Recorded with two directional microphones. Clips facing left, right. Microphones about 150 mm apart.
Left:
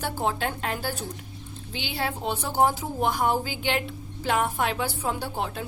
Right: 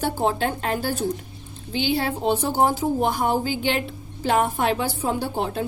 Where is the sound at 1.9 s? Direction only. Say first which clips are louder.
Right 4 dB; 30° right (ahead or behind).